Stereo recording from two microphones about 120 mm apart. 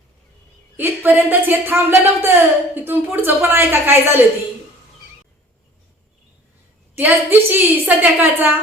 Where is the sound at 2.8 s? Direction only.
15° right (ahead or behind).